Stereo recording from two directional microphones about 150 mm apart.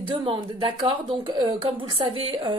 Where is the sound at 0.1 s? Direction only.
35° right (ahead or behind).